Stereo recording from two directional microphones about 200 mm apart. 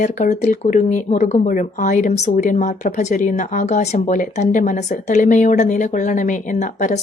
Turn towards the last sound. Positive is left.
turn(degrees=40)  # may be behind; listen again after turning